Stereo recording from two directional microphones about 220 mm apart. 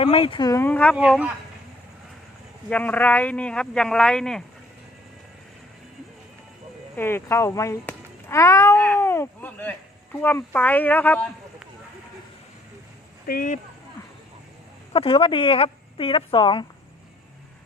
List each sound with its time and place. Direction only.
0.0 s speech: 25° left (ahead or behind); by 0.9 s 5° left (ahead or behind)
0.9 s speech: 5° right (ahead or behind)
2.6 s speech: 5° left (ahead or behind)
6.9 s speech: 10° left (ahead or behind)
13.2 s speech: 40° left (ahead or behind)
14.9 s speech: 25° left (ahead or behind)